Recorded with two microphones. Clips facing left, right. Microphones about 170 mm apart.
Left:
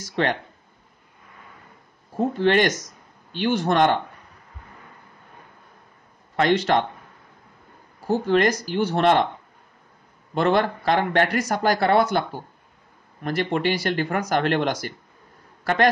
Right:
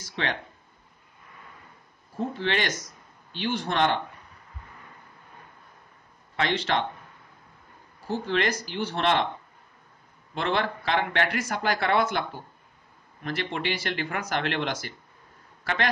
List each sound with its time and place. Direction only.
0.0 s speech: 50° left (ahead or behind)
2.1 s speech: 50° left (ahead or behind)
6.3 s speech: 45° left (ahead or behind)
8.1 s speech: 45° left (ahead or behind)
10.3 s a man's voice: 45° left (ahead or behind)